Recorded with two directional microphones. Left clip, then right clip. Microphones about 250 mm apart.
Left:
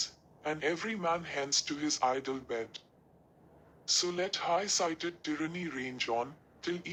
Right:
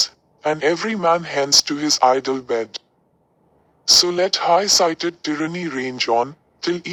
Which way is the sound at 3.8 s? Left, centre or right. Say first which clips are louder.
Right 17 dB; right.